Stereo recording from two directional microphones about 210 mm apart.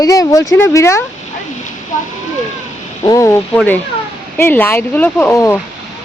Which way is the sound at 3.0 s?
15° left (ahead or behind).